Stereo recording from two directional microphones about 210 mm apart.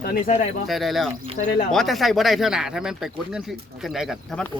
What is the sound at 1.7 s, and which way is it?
Speech, centre (ahead or behind).